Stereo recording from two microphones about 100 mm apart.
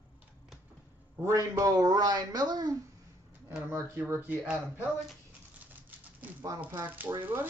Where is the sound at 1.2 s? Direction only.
30° right (ahead or behind).